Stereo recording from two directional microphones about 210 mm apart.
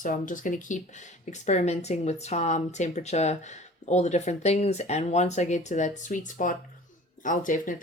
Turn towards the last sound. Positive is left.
turn(degrees=40)  # may be behind; listen again after turning